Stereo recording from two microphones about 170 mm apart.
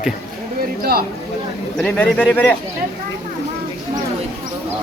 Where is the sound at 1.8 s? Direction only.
10° left (ahead or behind).